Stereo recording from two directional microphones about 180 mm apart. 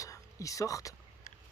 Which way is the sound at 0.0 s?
20° left (ahead or behind).